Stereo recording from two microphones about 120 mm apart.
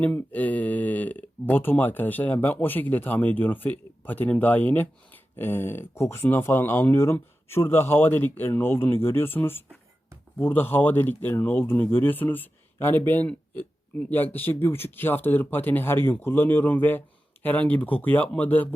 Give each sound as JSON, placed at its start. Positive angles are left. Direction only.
{"t": 0.2, "sound": "speech", "side_deg": 15}